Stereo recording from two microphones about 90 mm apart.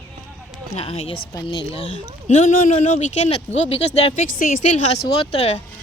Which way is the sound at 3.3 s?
90° left.